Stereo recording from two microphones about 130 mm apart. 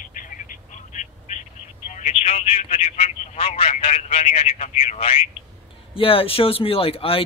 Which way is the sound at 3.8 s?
50° left (ahead or behind).